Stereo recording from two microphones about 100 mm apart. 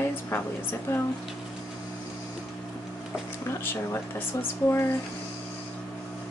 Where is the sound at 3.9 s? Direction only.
25° left (ahead or behind).